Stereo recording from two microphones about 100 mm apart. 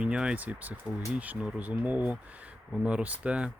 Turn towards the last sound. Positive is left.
turn(degrees=-10)  # may be behind; listen again after turning